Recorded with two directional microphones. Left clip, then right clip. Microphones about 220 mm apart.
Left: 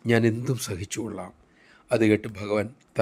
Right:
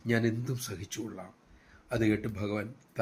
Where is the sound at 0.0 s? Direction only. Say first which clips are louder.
Left 8 dB; 45° left (ahead or behind).